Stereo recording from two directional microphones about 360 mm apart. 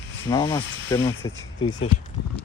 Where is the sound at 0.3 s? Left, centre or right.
Centre.